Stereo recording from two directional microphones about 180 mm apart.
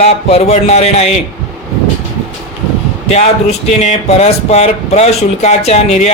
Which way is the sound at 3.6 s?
40° left (ahead or behind).